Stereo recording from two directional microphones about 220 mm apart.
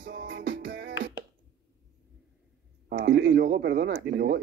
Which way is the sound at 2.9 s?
55° right (ahead or behind).